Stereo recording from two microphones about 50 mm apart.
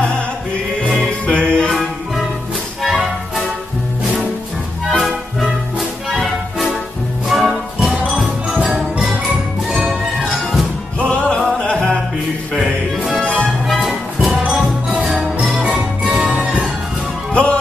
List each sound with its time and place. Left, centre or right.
1.2 s music: left
1.7 s music: centre
5.8 s music: centre
7.2 s music: centre
9.7 s music: centre
11.0 s music: left
13.1 s music: left
13.7 s music: centre
14.4 s music: centre
15.5 s music: centre
17.3 s music: left